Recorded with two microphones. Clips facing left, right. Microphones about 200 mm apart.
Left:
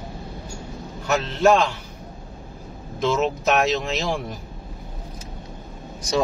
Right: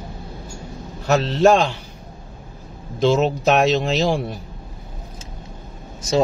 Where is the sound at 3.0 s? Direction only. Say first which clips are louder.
Right 5 dB; 30° right (ahead or behind).